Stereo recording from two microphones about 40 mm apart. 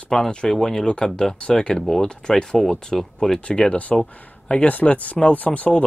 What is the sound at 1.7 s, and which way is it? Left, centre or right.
Speech, centre.